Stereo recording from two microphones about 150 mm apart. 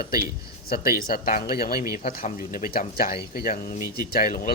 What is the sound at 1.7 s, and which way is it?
Speech, 20° right (ahead or behind).